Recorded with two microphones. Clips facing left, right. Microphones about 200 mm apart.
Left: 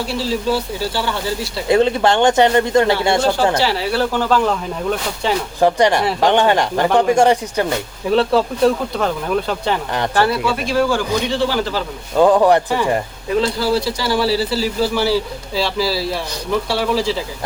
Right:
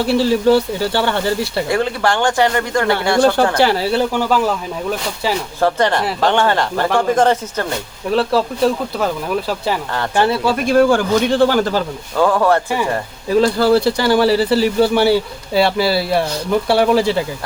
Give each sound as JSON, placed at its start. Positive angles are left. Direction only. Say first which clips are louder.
{"t": 0.1, "sound": "speech", "louder": "right 8 dB", "side_deg": -60}
{"t": 1.7, "sound": "speech", "louder": "left 6 dB", "side_deg": 20}
{"t": 3.6, "sound": "speech", "louder": "right 4 dB", "side_deg": -50}
{"t": 4.1, "sound": "speech", "louder": "even", "side_deg": -10}
{"t": 5.5, "sound": "speech", "louder": "left 2 dB", "side_deg": 15}
{"t": 8.1, "sound": "speech", "louder": "left 1 dB", "side_deg": 0}
{"t": 10.2, "sound": "speech", "louder": "right 2 dB", "side_deg": -25}
{"t": 10.4, "sound": "speech", "louder": "right 5 dB", "side_deg": -50}
{"t": 12.1, "sound": "speech", "louder": "left 3 dB", "side_deg": 20}
{"t": 13.3, "sound": "speech", "louder": "right 5 dB", "side_deg": -50}